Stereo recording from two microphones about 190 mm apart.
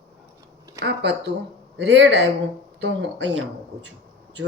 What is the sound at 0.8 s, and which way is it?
Speech, 60° right (ahead or behind).